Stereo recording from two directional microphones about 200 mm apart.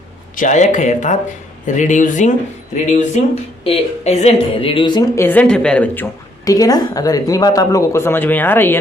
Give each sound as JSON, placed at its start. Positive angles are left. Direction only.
{"t": 0.3, "sound": "a woman's voice", "side_deg": 40}